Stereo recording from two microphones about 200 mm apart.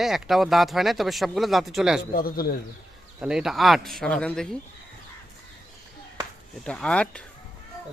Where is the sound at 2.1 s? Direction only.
50° left (ahead or behind).